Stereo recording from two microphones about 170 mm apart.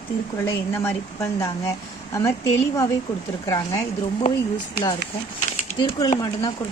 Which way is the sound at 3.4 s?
20° left (ahead or behind).